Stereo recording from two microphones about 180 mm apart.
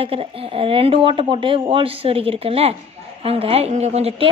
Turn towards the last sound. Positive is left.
turn(degrees=-35)  # may be behind; listen again after turning